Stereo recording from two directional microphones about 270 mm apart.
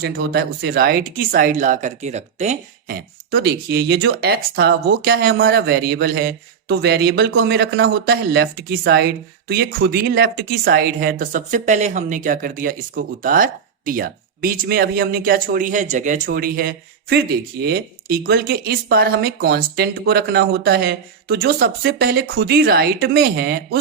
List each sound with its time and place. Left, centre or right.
0.0 s speech: right